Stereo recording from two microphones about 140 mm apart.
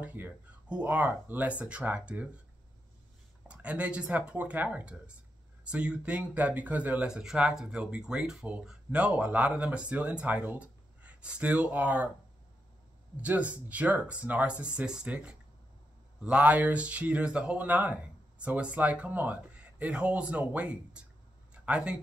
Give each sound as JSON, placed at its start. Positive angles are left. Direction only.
{"t": 0.0, "sound": "speech", "side_deg": -10}
{"t": 3.4, "sound": "speech", "side_deg": -10}
{"t": 13.2, "sound": "speech", "side_deg": -10}